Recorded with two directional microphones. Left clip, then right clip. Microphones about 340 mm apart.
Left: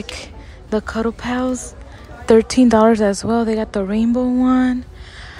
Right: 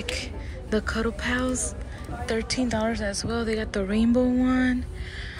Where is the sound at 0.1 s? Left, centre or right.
Centre.